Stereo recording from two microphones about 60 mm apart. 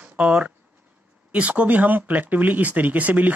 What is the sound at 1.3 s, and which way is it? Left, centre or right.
Speech, right.